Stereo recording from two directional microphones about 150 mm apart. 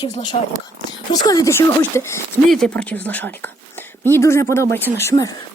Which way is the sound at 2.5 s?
5° left (ahead or behind).